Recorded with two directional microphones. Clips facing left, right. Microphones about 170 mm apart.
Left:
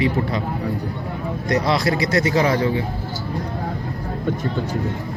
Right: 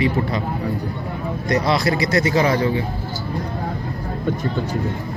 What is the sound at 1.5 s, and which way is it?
Speech, centre (ahead or behind).